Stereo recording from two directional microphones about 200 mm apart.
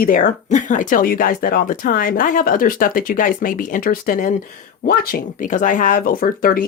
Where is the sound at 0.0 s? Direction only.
45° left (ahead or behind).